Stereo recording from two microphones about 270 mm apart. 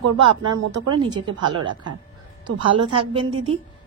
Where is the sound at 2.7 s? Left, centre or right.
Centre.